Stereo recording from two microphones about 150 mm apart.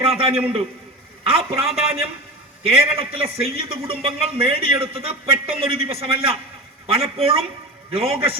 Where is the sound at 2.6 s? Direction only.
40° right (ahead or behind).